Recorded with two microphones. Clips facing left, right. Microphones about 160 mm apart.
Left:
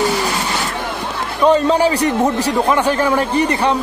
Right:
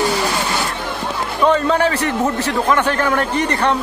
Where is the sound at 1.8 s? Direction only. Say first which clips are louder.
Left 3 dB; 15° left (ahead or behind).